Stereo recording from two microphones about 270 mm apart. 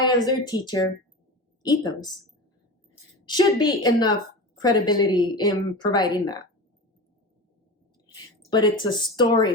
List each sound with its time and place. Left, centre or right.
0.0 s a woman's voice: centre
3.2 s a woman's voice: centre
8.4 s a woman's voice: centre